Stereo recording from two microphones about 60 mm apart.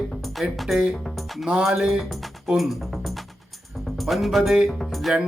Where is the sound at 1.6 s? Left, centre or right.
Centre.